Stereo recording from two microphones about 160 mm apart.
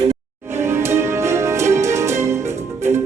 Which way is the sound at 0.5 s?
15° right (ahead or behind).